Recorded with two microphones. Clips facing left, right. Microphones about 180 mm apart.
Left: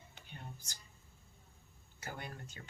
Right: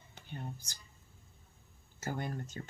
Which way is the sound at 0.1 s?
40° right (ahead or behind).